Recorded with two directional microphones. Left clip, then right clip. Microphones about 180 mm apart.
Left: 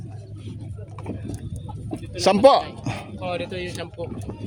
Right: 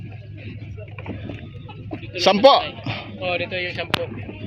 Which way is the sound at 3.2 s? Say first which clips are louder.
Right 5 dB; 80° left.